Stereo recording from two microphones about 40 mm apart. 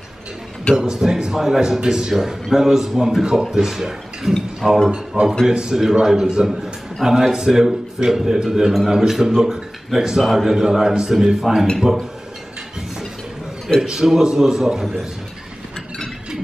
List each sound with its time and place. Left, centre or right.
0.7 s speech: centre
4.9 s a man's voice: centre
13.8 s speech: centre